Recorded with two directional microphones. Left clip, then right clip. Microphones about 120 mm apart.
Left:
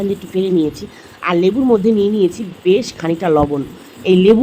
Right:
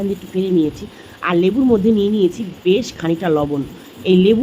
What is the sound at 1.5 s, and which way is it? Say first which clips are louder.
Speech: left 2 dB; centre (ahead or behind).